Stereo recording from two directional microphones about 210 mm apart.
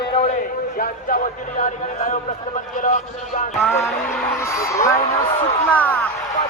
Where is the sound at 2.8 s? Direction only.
40° left (ahead or behind).